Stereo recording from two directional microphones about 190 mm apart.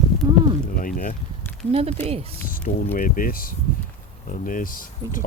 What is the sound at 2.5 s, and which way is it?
Speech, 45° left (ahead or behind).